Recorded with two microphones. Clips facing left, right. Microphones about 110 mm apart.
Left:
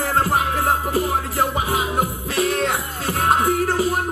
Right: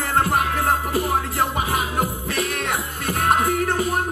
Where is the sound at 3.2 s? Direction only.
20° left (ahead or behind).